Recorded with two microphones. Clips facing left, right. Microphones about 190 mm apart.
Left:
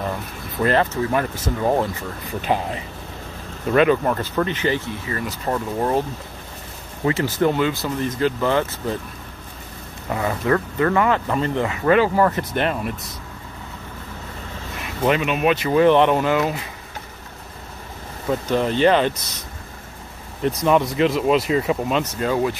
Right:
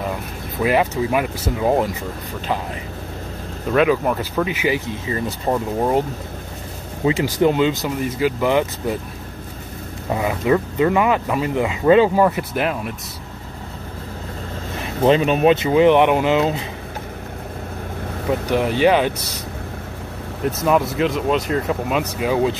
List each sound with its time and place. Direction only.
0.6 s speech: 10° right (ahead or behind)
3.7 s speech: 5° right (ahead or behind)
5.0 s speech: 20° right (ahead or behind)
7.1 s speech: 15° right (ahead or behind)
10.1 s speech: 15° right (ahead or behind)
12.3 s speech: 5° right (ahead or behind)
14.8 s speech: 30° right (ahead or behind)
18.5 s speech: 10° right (ahead or behind)
20.4 s speech: 5° right (ahead or behind)